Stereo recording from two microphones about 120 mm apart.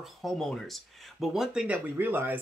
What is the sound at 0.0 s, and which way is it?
Speech, centre (ahead or behind).